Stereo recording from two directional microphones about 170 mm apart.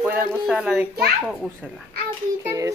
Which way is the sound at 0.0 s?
10° right (ahead or behind).